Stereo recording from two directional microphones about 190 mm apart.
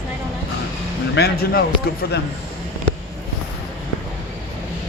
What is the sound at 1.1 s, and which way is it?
Speech, 55° left (ahead or behind).